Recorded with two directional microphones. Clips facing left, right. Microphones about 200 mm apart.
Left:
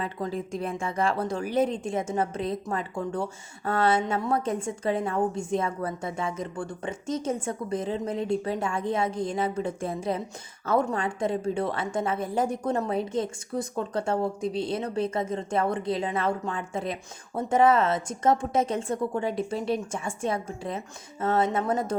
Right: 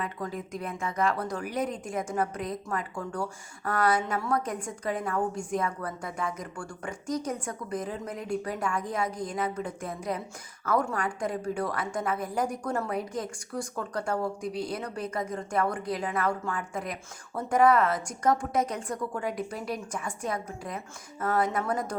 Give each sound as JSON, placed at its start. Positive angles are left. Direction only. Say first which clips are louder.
{"t": 0.0, "sound": "a woman's voice", "louder": "left 3 dB", "side_deg": 30}